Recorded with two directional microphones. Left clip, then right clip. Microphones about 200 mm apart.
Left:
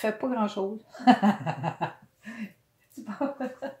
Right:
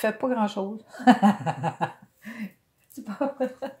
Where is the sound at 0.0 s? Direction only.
40° right (ahead or behind).